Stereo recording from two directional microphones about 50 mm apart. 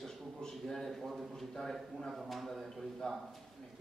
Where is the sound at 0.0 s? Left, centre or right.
Centre.